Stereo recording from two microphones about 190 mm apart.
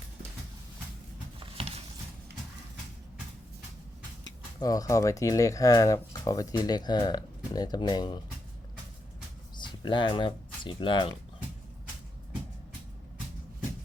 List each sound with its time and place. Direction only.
1.4 s patter: 30° right (ahead or behind)
4.6 s speech: 20° left (ahead or behind)
9.6 s speech: 25° left (ahead or behind)